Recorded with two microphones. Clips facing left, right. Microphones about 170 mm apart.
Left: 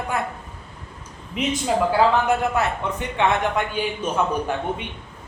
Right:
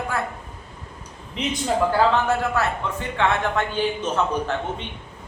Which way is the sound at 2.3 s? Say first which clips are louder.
Left 1 dB; 20° left (ahead or behind).